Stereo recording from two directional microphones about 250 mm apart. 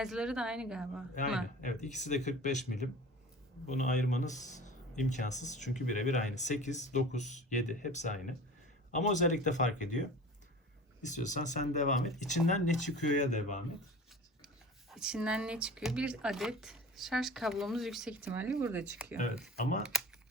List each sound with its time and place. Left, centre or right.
0.0 s speech: centre
1.6 s speech: left
11.0 s speech: left
14.4 s speech: centre